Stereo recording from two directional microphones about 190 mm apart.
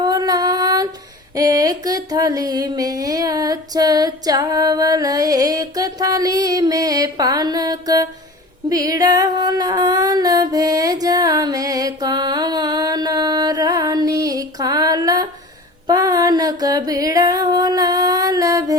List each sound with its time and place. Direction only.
0.0 s female singing: 20° right (ahead or behind)
1.4 s a sound: 20° right (ahead or behind)
8.7 s music: 20° right (ahead or behind)